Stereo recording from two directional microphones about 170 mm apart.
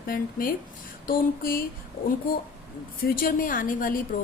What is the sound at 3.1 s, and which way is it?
A woman's voice, 55° left (ahead or behind).